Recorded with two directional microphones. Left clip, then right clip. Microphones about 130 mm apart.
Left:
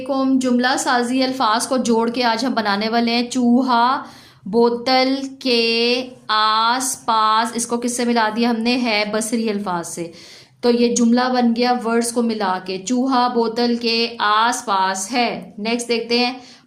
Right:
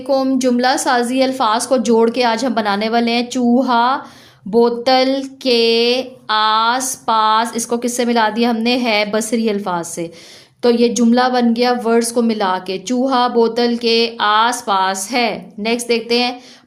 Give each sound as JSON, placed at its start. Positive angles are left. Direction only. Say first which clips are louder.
{"t": 0.1, "sound": "a woman's voice", "louder": "right 4 dB", "side_deg": -45}